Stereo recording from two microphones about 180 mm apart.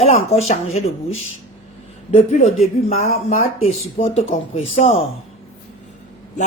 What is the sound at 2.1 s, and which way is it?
Speech, 35° left (ahead or behind).